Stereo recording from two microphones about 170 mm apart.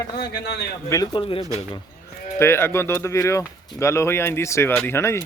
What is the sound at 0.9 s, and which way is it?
Speech, 20° left (ahead or behind).